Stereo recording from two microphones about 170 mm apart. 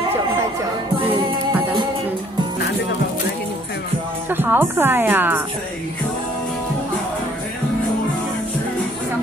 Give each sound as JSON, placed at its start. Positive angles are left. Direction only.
{"t": 4.3, "sound": "a woman's voice", "side_deg": -10}